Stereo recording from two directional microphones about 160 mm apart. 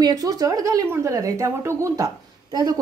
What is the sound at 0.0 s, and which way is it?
A woman's voice, 25° right (ahead or behind).